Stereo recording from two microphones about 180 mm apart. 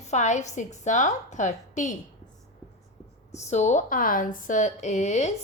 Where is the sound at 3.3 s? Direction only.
40° left (ahead or behind).